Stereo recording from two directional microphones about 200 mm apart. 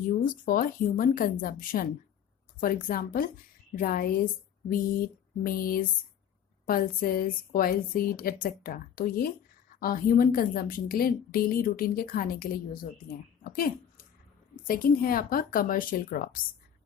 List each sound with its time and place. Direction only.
0.2 s a woman's voice: 45° left (ahead or behind)